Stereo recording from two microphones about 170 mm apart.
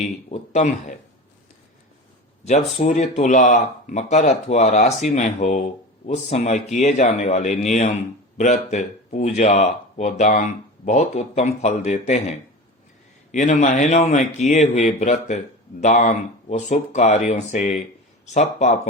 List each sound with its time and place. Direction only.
0.3 s a sound: 45° left (ahead or behind)
2.4 s speech: 40° left (ahead or behind)
13.3 s speech: 45° left (ahead or behind)